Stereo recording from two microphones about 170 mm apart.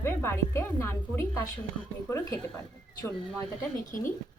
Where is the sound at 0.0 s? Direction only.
15° left (ahead or behind).